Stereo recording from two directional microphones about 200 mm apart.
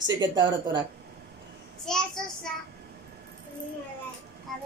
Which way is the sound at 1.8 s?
5° left (ahead or behind).